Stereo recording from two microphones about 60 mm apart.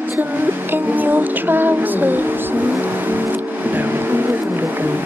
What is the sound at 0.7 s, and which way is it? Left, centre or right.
Music, right.